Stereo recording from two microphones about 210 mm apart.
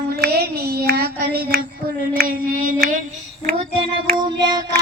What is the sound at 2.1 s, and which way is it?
Mantra, 40° right (ahead or behind).